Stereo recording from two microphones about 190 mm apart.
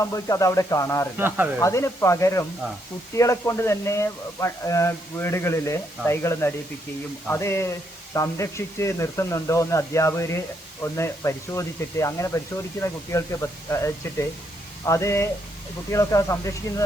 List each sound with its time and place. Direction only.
0.0 s speech: 15° left (ahead or behind)